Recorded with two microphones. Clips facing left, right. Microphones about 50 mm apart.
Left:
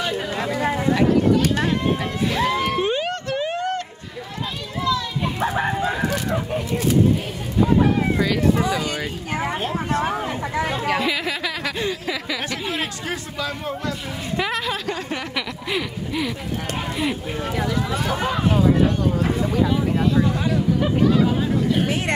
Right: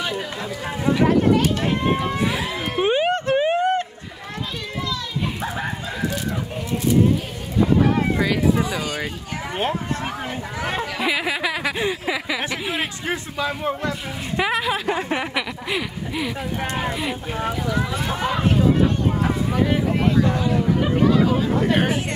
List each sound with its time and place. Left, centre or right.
0.4 s a sound: left
2.0 s crowd: centre
2.6 s music: right
5.4 s music: left
8.2 s speech: centre
10.6 s speech: right
11.0 s speech: centre
15.7 s speech: centre
19.5 s speech: right
21.5 s speech: right